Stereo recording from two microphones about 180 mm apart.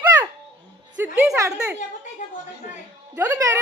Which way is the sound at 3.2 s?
20° right (ahead or behind).